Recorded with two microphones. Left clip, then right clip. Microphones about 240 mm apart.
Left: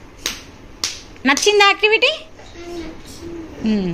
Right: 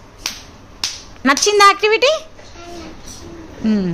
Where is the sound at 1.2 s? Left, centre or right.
Right.